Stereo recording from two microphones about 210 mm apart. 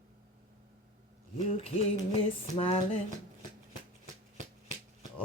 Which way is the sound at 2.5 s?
25° left (ahead or behind).